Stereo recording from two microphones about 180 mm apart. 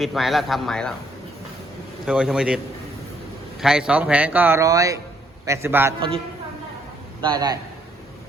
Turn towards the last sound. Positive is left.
turn(degrees=-20)  # may be behind; listen again after turning